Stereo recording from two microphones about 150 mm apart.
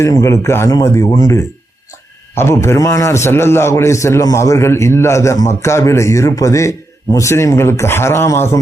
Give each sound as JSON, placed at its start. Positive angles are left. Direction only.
{"t": 0.0, "sound": "a man's voice", "side_deg": 20}